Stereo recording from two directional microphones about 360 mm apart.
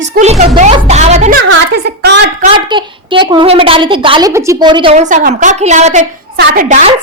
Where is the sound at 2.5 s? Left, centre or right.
Centre.